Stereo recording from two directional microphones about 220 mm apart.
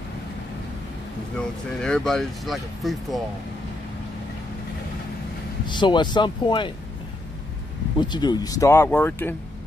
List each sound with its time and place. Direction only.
1.8 s speech: 5° left (ahead or behind)
5.7 s speech: 20° left (ahead or behind)
8.0 s speech: 20° left (ahead or behind)